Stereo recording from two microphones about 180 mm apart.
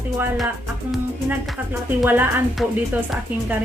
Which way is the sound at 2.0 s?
10° right (ahead or behind).